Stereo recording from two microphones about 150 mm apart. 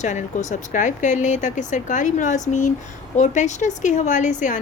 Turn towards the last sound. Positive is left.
turn(degrees=55)  # may be behind; listen again after turning